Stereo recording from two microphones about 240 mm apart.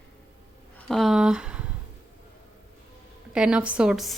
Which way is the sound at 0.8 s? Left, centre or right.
Centre.